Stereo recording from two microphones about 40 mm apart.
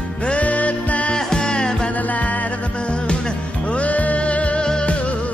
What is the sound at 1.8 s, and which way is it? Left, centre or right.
Music, left.